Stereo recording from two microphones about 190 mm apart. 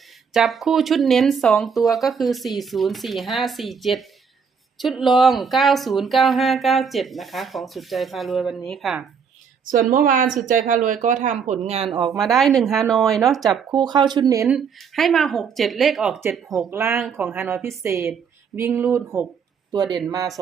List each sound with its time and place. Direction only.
0.3 s speech: centre (ahead or behind)
9.9 s speech: 45° right (ahead or behind)
11.9 s speech: 20° right (ahead or behind)
12.3 s speech: centre (ahead or behind)
13.7 s speech: 20° right (ahead or behind)
14.4 s speech: centre (ahead or behind)
16.6 s a woman's voice: 15° right (ahead or behind)